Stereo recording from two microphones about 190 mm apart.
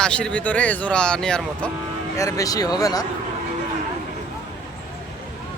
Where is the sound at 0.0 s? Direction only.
5° left (ahead or behind).